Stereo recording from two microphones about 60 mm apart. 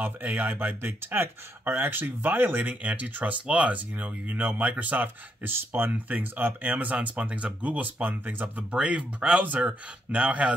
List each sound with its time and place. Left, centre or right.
0.0 s speech: right
2.7 s speech: right